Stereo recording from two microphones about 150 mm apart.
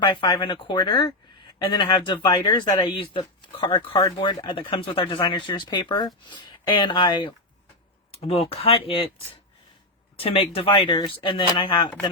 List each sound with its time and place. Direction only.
0.1 s speech: 30° left (ahead or behind)